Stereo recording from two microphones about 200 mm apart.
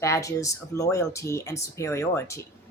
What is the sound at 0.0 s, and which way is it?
Speech, 15° left (ahead or behind).